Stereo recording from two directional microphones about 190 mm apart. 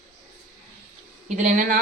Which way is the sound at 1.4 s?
40° right (ahead or behind).